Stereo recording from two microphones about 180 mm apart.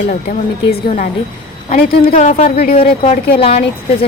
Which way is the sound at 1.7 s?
35° left (ahead or behind).